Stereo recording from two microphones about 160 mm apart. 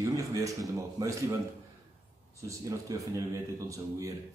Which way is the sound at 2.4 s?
20° right (ahead or behind).